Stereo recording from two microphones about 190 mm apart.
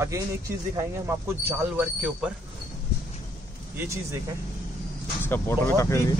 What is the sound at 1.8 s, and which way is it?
Speech, 5° right (ahead or behind).